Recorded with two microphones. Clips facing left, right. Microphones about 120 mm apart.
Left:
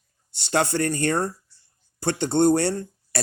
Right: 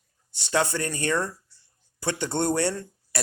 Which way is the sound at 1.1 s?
50° left (ahead or behind).